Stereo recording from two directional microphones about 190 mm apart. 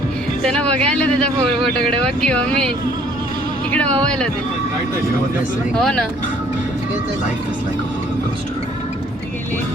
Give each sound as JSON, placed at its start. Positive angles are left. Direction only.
{"t": 0.5, "sound": "speech", "side_deg": 5}
{"t": 3.7, "sound": "speech", "side_deg": 5}
{"t": 5.8, "sound": "speech", "side_deg": 5}